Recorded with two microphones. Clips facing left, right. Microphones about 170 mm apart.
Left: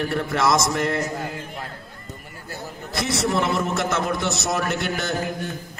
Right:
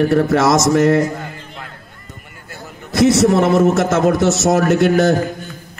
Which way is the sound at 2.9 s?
50° right (ahead or behind).